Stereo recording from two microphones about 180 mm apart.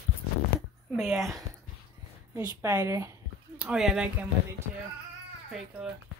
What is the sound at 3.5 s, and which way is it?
Speech, 5° right (ahead or behind).